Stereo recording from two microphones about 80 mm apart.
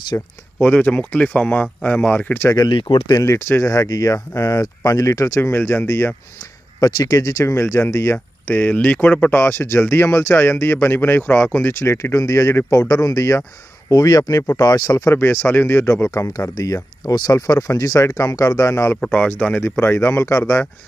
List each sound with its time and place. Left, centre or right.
0.1 s speech: left
0.6 s speech: left
2.7 s speech: left
3.1 s speech: left
6.8 s speech: left
8.5 s speech: left
15.1 s speech: left
19.1 s speech: centre
19.8 s speech: left